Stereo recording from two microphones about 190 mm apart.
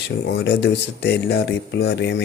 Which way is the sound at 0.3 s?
60° left (ahead or behind).